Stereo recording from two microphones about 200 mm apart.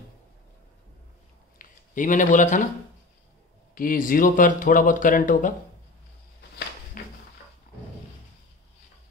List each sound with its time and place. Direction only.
1.6 s speech: 40° left (ahead or behind)
3.7 s speech: 45° left (ahead or behind)
7.0 s a sound: 45° left (ahead or behind)